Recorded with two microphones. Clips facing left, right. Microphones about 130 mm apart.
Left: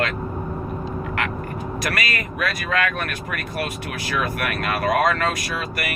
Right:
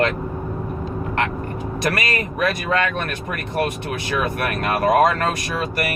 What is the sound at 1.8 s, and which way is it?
Speech, 30° right (ahead or behind).